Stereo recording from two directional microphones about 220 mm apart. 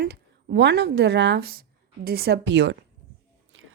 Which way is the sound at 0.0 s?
45° right (ahead or behind).